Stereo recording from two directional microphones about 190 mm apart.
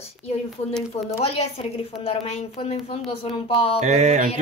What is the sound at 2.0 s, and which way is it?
A child's voice, 35° left (ahead or behind).